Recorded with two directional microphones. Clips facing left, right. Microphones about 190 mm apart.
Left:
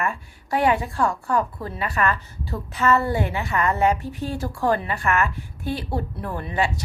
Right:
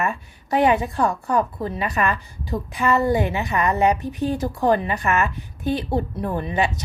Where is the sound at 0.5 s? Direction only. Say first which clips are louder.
Right 3 dB; 20° right (ahead or behind).